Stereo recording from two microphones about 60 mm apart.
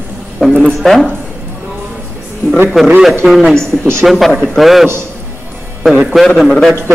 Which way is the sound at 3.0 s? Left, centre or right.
Centre.